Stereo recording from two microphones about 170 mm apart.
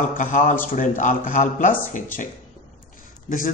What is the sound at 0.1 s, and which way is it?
Speech, 50° left (ahead or behind).